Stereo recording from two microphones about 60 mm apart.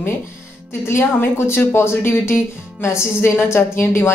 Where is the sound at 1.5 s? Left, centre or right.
Left.